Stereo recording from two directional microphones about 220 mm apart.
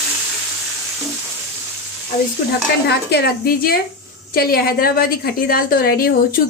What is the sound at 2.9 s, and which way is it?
A woman's voice, 50° left (ahead or behind).